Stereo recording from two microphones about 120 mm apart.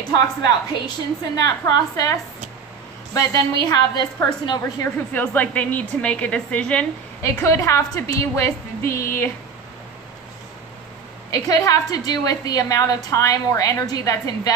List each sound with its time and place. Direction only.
0.1 s a woman's voice: 35° left (ahead or behind)
3.2 s a woman's voice: 35° left (ahead or behind)
5.1 s a woman's voice: 15° left (ahead or behind)
7.2 s a woman's voice: 25° left (ahead or behind)
11.2 s a woman's voice: 30° left (ahead or behind)